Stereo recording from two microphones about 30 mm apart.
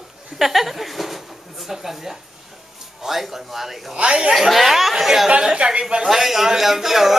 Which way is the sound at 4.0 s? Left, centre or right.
Right.